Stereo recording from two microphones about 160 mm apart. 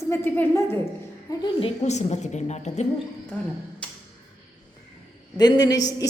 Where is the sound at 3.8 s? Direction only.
5° left (ahead or behind).